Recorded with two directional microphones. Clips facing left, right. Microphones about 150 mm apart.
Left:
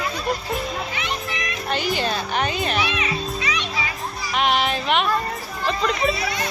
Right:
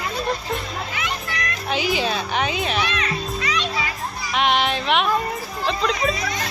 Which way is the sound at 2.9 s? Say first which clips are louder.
Even; 15° left (ahead or behind).